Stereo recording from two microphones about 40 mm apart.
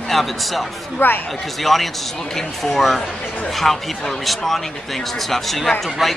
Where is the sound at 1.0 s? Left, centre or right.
Left.